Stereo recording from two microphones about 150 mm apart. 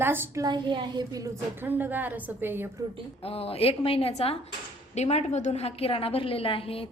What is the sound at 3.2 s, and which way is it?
A woman's voice, 40° left (ahead or behind).